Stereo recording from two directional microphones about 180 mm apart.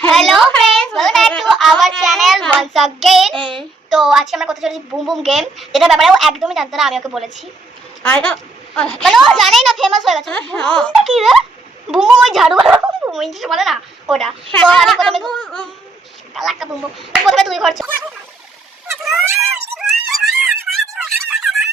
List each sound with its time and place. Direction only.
0.0 s a sound: centre (ahead or behind)
3.3 s child singing: 30° right (ahead or behind)
3.8 s a woman's voice: centre (ahead or behind)
19.2 s speech: 15° right (ahead or behind)
19.8 s music: centre (ahead or behind)